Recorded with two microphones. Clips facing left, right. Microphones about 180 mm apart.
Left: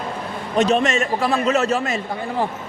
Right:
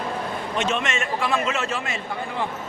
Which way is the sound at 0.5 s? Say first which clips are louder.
Left 9 dB; 35° left (ahead or behind).